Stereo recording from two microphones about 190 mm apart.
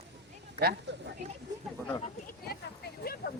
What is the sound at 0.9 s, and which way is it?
Speech, 65° right (ahead or behind).